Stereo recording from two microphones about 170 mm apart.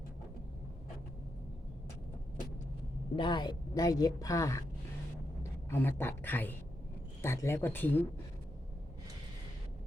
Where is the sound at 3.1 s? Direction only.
25° left (ahead or behind).